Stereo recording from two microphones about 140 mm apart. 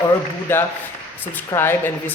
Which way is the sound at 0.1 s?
15° left (ahead or behind).